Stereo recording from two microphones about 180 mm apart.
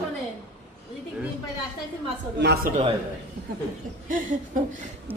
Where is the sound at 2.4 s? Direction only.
70° right (ahead or behind).